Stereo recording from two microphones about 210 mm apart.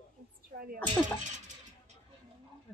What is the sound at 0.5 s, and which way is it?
Speech, 45° right (ahead or behind).